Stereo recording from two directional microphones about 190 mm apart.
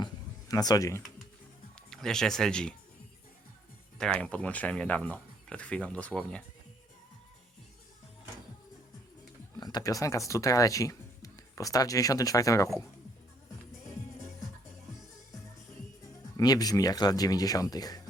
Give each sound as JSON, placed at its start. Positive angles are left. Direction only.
{"t": 0.0, "sound": "a sound", "side_deg": 20}
{"t": 1.9, "sound": "speech", "side_deg": 5}
{"t": 3.9, "sound": "speech", "side_deg": 5}
{"t": 9.6, "sound": "speech", "side_deg": 20}
{"t": 16.4, "sound": "speech", "side_deg": 20}